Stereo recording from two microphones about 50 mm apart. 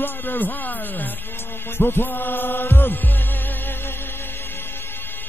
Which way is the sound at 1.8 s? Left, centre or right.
Left.